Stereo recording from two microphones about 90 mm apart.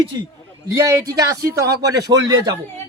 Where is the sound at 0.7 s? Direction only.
35° right (ahead or behind).